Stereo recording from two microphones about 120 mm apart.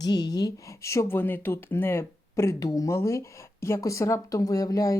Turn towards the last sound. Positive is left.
turn(degrees=30)  # may be behind; listen again after turning